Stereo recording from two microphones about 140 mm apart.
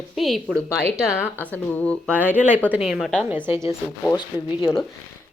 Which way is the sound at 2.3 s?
10° right (ahead or behind).